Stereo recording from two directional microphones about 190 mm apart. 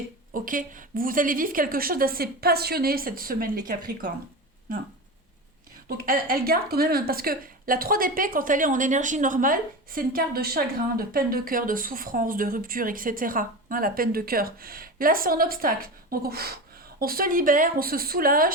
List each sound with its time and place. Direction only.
0.3 s a woman's voice: 45° right (ahead or behind)
6.1 s a woman's voice: 50° right (ahead or behind)